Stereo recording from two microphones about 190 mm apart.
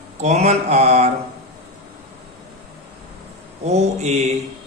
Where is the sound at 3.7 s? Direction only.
35° right (ahead or behind).